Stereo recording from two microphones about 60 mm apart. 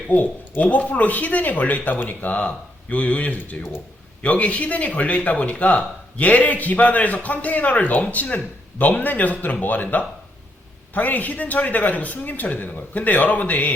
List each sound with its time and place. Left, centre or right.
0.1 s speech: left